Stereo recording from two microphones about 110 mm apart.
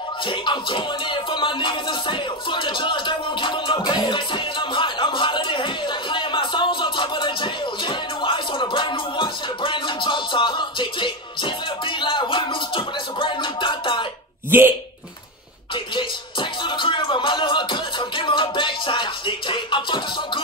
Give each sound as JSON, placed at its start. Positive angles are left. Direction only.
{"t": 0.2, "sound": "music", "side_deg": 45}
{"t": 14.5, "sound": "speech", "side_deg": -20}
{"t": 15.7, "sound": "music", "side_deg": 45}